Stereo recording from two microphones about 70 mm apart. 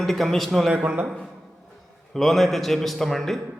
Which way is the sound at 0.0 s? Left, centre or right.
Centre.